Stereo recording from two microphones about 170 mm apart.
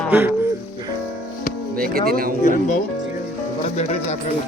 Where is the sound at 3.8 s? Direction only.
40° left (ahead or behind).